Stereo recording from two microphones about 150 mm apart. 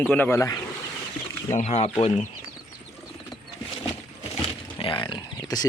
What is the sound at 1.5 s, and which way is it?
Speech, 45° left (ahead or behind).